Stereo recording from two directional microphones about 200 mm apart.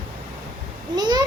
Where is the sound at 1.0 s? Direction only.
20° right (ahead or behind).